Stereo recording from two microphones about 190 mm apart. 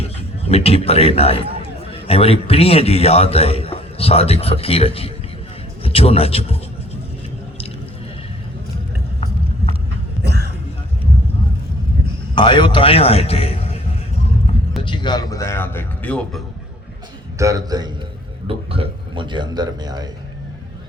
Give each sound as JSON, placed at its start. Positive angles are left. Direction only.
{"t": 0.0, "sound": "a man's voice", "side_deg": 30}
{"t": 10.2, "sound": "a sound", "side_deg": -60}
{"t": 12.3, "sound": "a man's voice", "side_deg": 25}
{"t": 14.8, "sound": "speech", "side_deg": 25}
{"t": 17.3, "sound": "a man's voice", "side_deg": -15}